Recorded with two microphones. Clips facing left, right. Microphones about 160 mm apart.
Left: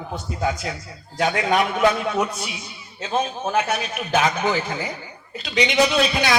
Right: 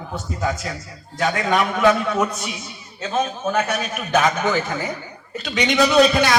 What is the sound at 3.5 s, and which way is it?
A man's voice, 45° right (ahead or behind).